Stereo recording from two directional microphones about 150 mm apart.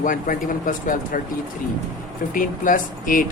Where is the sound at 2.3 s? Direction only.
65° left (ahead or behind).